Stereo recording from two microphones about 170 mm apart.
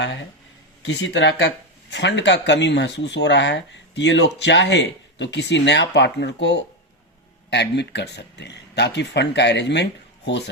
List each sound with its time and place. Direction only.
0.0 s speech: 90° left